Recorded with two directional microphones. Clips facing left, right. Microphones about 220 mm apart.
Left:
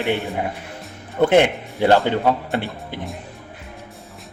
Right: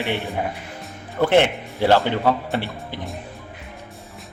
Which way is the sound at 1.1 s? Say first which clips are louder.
Left 2 dB; 20° left (ahead or behind).